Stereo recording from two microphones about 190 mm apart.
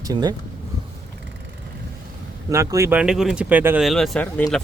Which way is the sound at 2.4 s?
15° right (ahead or behind).